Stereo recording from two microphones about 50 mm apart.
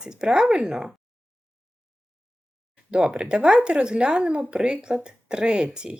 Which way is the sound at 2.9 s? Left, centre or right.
Centre.